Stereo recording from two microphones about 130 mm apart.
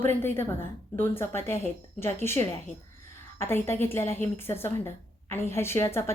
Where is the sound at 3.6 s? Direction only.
20° left (ahead or behind).